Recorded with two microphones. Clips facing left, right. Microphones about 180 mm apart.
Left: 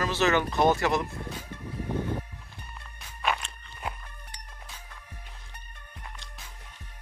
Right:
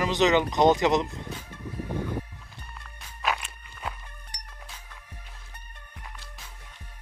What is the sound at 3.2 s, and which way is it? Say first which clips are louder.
Walk: even; 5° right (ahead or behind).